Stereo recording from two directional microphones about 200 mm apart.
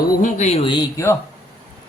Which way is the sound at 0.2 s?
35° left (ahead or behind).